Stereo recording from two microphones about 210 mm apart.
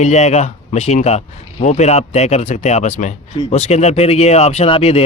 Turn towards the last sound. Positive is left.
turn(degrees=30)  # may be behind; listen again after turning